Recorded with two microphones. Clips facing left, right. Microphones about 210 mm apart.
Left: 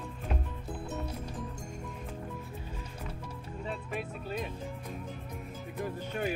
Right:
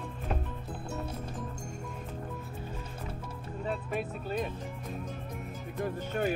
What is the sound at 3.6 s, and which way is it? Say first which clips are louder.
Music: right 4 dB; 45° right (ahead or behind).